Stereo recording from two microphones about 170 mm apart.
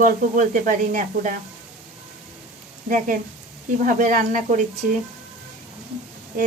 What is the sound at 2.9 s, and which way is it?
Speech, 50° right (ahead or behind).